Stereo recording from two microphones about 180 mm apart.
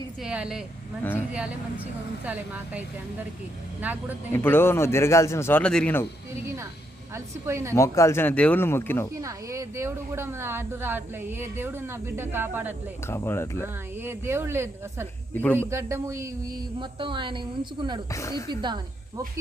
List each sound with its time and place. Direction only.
0.2 s a woman's voice: 5° right (ahead or behind)
2.2 s speech: 10° right (ahead or behind)
3.8 s speech: 10° right (ahead or behind)
4.3 s speech: 10° left (ahead or behind)
7.1 s speech: 15° right (ahead or behind)
7.8 s speech: 15° left (ahead or behind)
9.2 s speech: 15° right (ahead or behind)
13.1 s speech: 15° left (ahead or behind)
14.0 s speech: 15° right (ahead or behind)
16.8 s a woman's voice: 25° right (ahead or behind)
18.1 s speech: 20° left (ahead or behind)
18.6 s speech: 25° right (ahead or behind)